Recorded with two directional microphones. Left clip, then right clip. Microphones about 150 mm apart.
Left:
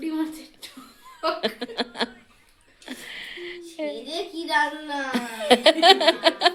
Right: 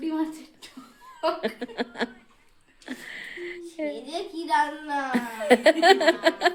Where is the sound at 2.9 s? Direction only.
30° right (ahead or behind).